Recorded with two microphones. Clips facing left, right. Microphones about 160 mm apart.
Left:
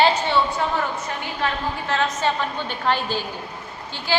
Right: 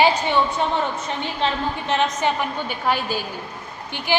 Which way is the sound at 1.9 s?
15° right (ahead or behind).